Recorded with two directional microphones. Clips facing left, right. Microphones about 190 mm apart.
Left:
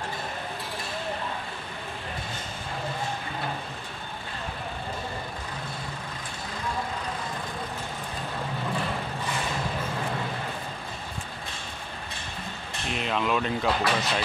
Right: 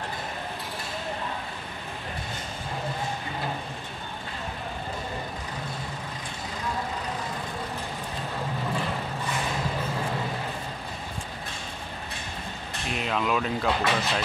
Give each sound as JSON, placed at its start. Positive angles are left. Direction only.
{"t": 12.9, "sound": "speech", "side_deg": 0}